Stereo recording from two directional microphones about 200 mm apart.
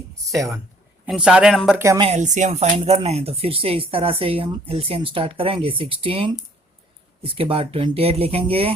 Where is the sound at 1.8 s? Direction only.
15° right (ahead or behind).